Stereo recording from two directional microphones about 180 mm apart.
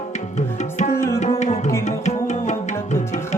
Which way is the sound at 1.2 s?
40° left (ahead or behind).